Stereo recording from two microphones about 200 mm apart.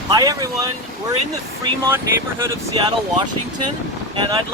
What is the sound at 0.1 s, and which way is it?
Speech, 20° right (ahead or behind).